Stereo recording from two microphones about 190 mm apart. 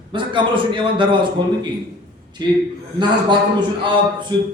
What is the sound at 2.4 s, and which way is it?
A man's voice, 20° right (ahead or behind).